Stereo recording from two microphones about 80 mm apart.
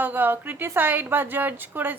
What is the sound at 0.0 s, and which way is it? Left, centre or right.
A woman's voice, right.